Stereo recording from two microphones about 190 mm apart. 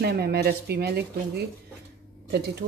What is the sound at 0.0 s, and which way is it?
Speech, 55° right (ahead or behind).